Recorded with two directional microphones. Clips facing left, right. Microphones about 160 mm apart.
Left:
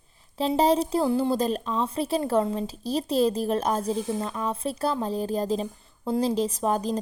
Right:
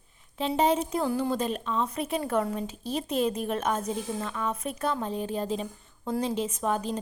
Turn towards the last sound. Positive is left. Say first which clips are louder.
# left 3 dB
turn(degrees=35)  # may be behind; listen again after turning